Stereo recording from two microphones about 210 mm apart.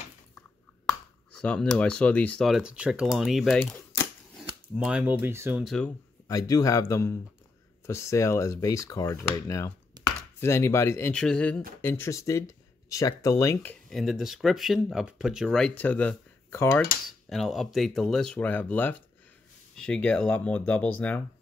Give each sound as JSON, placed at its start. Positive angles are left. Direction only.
{"t": 0.8, "sound": "speech", "side_deg": 5}
{"t": 4.7, "sound": "speech", "side_deg": -5}
{"t": 5.6, "sound": "speech", "side_deg": 0}
{"t": 6.2, "sound": "speech", "side_deg": 15}